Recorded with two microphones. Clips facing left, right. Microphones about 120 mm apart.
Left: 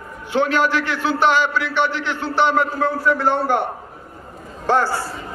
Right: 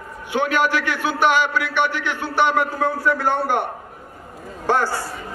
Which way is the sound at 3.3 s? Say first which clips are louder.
Left 2 dB; 15° right (ahead or behind).